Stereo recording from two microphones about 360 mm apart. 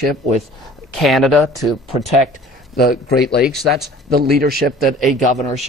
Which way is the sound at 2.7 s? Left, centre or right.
Left.